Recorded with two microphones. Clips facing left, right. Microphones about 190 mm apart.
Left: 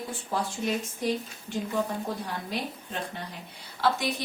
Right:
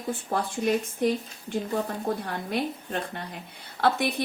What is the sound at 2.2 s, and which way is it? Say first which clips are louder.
Speech: right 4 dB; 55° right (ahead or behind).